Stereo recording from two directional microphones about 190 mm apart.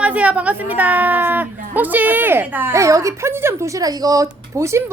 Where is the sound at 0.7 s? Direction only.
10° right (ahead or behind).